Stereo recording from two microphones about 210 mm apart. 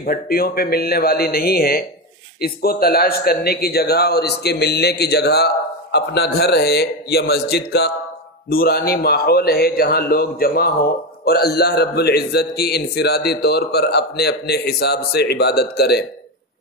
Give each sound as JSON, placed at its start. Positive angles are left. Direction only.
{"t": 0.0, "sound": "a man's voice", "side_deg": 45}